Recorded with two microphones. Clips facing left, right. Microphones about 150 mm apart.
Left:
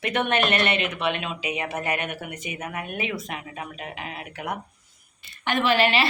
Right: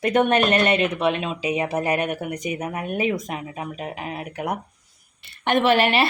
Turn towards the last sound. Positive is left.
turn(degrees=-55)  # may be behind; listen again after turning